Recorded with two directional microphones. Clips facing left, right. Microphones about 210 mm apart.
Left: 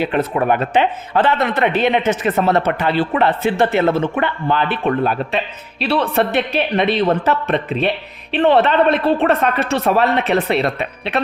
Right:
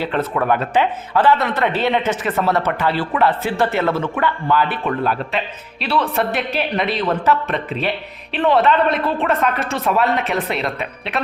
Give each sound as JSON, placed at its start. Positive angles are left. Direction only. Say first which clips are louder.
{"t": 0.0, "sound": "speech", "louder": "left 3 dB", "side_deg": 15}
{"t": 5.9, "sound": "speech", "louder": "left 3 dB", "side_deg": 25}
{"t": 9.6, "sound": "speech", "louder": "left 5 dB", "side_deg": 70}
{"t": 9.8, "sound": "speech", "louder": "left 1 dB", "side_deg": 30}